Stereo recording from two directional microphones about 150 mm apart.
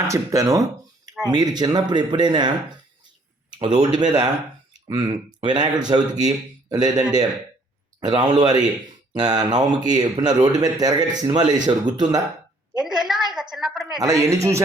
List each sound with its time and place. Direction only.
0.1 s speech: 20° right (ahead or behind)
8.0 s speech: 25° right (ahead or behind)
12.7 s a sound: 5° right (ahead or behind)
14.0 s speech: 25° right (ahead or behind)